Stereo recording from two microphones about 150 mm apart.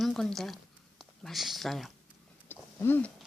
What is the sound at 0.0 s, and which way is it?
Speech, centre (ahead or behind).